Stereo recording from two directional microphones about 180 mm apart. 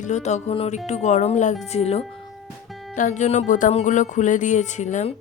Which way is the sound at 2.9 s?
40° left (ahead or behind).